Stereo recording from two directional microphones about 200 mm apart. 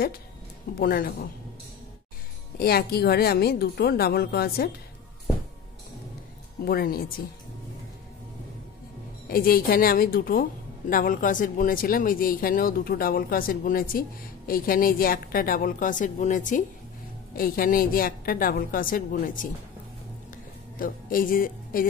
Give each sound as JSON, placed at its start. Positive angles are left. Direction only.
{"t": 0.7, "sound": "speech", "side_deg": 50}
{"t": 2.6, "sound": "speech", "side_deg": 50}
{"t": 6.6, "sound": "speech", "side_deg": 50}
{"t": 9.3, "sound": "speech", "side_deg": 50}
{"t": 20.8, "sound": "speech", "side_deg": 45}